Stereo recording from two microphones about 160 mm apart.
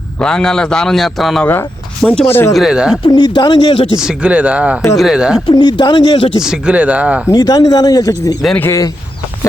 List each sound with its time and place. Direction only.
0.2 s a man's voice: 5° left (ahead or behind)
3.1 s speech: 25° left (ahead or behind)
3.9 s a man's voice: 5° right (ahead or behind)
5.5 s speech: 30° left (ahead or behind)
6.4 s speech: 5° right (ahead or behind)
7.3 s speech: 20° left (ahead or behind)
8.4 s speech: 5° left (ahead or behind)